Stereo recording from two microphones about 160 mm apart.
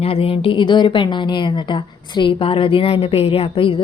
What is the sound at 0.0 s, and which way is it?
A woman's voice, 35° left (ahead or behind).